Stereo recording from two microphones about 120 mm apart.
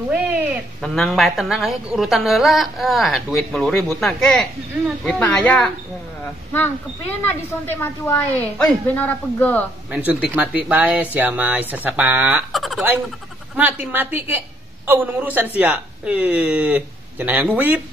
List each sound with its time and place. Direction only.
0.7 s a woman's voice: centre (ahead or behind)
6.5 s speech: 15° left (ahead or behind)
9.8 s speech: 10° right (ahead or behind)
12.5 s a sound: centre (ahead or behind)
13.6 s speech: 15° right (ahead or behind)